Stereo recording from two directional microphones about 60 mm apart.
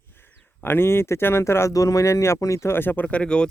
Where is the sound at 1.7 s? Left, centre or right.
Left.